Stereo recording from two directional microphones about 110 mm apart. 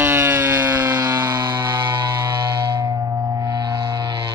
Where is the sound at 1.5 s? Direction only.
25° right (ahead or behind).